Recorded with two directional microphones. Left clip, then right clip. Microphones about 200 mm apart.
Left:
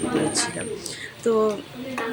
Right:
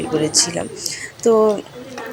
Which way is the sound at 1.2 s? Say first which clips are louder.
Right 7 dB; 10° right (ahead or behind).